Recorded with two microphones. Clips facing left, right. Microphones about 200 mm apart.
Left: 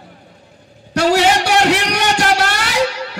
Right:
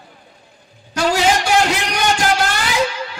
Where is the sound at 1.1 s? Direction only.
70° left (ahead or behind).